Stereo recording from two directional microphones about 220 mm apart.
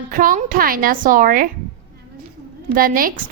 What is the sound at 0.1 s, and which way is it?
A woman's voice, 40° right (ahead or behind).